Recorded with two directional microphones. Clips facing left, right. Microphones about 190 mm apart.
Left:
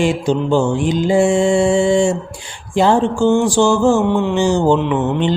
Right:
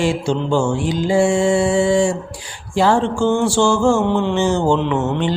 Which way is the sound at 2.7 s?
20° left (ahead or behind).